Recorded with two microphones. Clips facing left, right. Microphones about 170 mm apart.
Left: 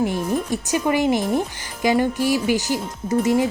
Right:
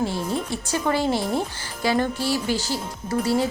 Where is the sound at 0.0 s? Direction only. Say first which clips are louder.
Left 4 dB; 15° left (ahead or behind).